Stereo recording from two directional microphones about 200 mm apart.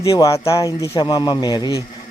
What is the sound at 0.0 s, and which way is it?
A man's voice, 15° left (ahead or behind).